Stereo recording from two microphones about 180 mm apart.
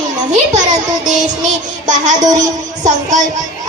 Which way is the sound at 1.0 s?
5° right (ahead or behind).